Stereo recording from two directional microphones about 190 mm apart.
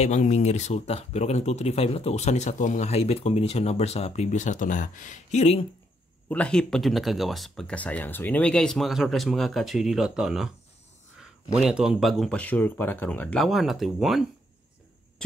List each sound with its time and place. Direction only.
0.0 s speech: 35° left (ahead or behind)
6.2 s speech: 5° left (ahead or behind)